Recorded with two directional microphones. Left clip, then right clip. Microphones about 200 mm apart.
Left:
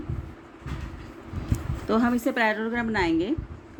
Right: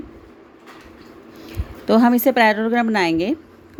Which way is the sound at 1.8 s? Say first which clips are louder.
Right 9 dB; 45° right (ahead or behind).